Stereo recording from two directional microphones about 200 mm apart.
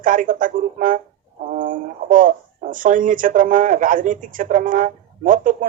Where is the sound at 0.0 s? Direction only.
40° right (ahead or behind).